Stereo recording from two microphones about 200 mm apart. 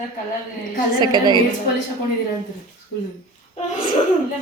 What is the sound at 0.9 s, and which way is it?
Speech, 20° right (ahead or behind).